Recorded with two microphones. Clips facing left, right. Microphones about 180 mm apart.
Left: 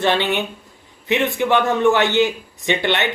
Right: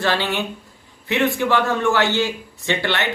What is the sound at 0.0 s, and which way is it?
A man's voice, 20° left (ahead or behind).